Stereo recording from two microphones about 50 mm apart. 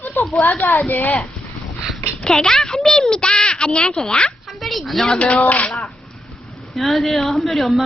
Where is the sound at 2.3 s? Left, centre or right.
Centre.